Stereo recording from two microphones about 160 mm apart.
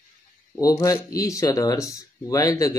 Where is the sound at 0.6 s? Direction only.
20° left (ahead or behind).